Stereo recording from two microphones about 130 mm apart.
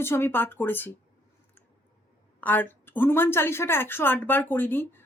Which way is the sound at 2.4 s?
15° left (ahead or behind).